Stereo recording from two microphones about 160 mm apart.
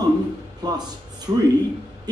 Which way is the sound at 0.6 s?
25° right (ahead or behind).